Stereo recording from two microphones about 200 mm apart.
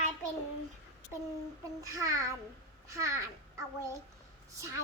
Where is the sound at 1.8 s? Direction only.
15° right (ahead or behind).